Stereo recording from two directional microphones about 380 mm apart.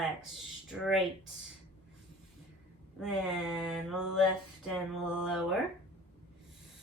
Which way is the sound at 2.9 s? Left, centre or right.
Centre.